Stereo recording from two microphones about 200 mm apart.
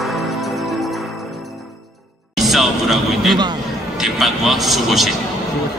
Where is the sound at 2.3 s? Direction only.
Centre (ahead or behind).